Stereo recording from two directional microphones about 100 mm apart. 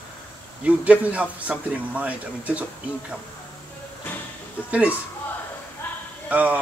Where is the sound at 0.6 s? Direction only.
15° right (ahead or behind).